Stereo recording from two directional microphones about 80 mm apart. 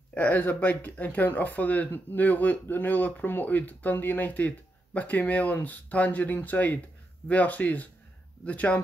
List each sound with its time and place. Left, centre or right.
0.1 s speech: centre